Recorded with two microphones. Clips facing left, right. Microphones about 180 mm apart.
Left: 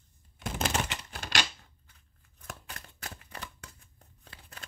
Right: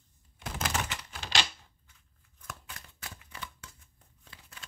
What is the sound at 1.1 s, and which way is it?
Typewriter, 50° left (ahead or behind).